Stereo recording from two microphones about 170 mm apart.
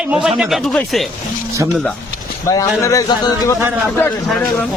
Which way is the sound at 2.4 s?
20° left (ahead or behind).